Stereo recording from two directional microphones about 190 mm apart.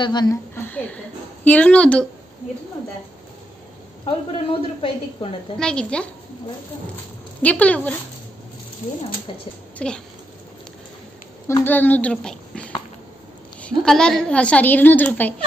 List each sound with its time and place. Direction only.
0.0 s a woman's voice: 20° left (ahead or behind); by 2.0 s 5° left (ahead or behind)
4.0 s a woman's voice: 30° left (ahead or behind)
5.6 s a woman's voice: 5° left (ahead or behind)
7.4 s a woman's voice: 10° left (ahead or behind)
9.8 s speech: 5° left (ahead or behind)
11.4 s a woman's voice: 15° left (ahead or behind)